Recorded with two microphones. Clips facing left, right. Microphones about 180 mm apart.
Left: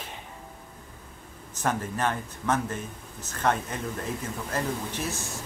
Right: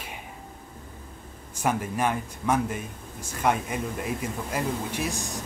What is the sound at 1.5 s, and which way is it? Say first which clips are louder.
Speech: right 2 dB; 10° right (ahead or behind).